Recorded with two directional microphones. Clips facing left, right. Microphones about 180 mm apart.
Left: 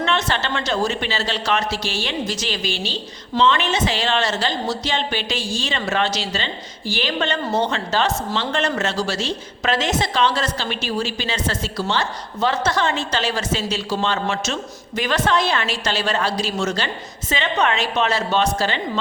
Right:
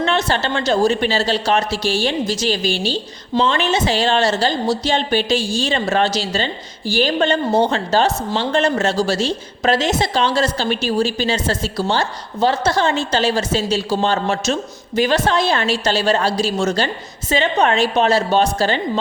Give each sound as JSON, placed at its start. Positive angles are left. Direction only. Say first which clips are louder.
{"t": 0.0, "sound": "a woman's voice", "louder": "right 3 dB", "side_deg": -35}